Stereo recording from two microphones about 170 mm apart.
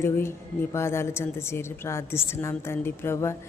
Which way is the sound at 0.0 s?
15° left (ahead or behind).